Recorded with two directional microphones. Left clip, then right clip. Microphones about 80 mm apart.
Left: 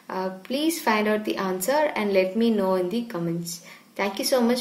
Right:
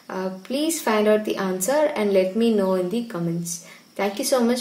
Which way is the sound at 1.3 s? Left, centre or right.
Right.